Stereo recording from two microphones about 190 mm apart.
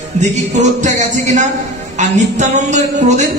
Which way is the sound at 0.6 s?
40° right (ahead or behind).